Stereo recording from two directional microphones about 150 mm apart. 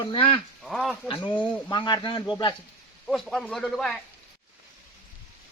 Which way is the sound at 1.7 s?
30° left (ahead or behind).